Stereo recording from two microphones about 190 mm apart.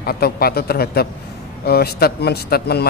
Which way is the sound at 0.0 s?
55° left (ahead or behind).